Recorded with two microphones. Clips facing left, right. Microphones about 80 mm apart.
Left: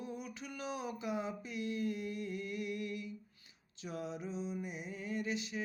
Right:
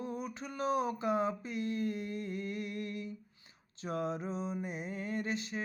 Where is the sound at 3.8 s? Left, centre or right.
Right.